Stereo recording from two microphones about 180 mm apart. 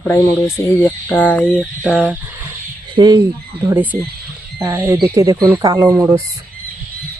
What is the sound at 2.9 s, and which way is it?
Speech, 20° right (ahead or behind).